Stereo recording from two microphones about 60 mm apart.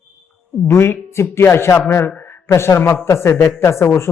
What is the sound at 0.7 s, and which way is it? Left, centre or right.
A man's voice, left.